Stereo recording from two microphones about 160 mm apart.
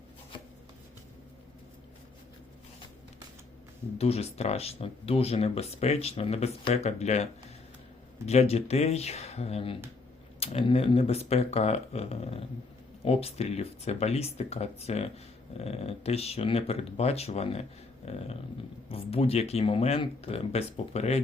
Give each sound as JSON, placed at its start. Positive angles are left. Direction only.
{"t": 3.9, "sound": "speech", "side_deg": 40}
{"t": 8.3, "sound": "speech", "side_deg": 40}